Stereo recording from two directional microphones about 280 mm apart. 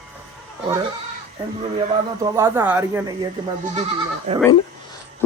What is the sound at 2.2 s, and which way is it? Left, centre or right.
Speech, centre.